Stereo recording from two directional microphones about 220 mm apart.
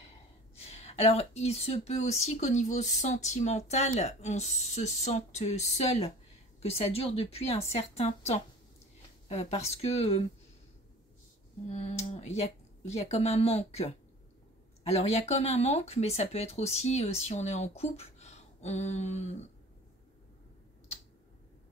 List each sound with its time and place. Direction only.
0.6 s speech: 30° left (ahead or behind)
11.6 s speech: 30° left (ahead or behind)